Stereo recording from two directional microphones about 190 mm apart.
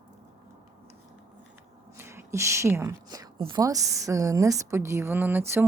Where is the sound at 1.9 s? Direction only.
15° right (ahead or behind).